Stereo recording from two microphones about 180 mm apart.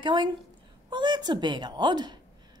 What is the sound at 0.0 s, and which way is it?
A woman's voice, 25° right (ahead or behind).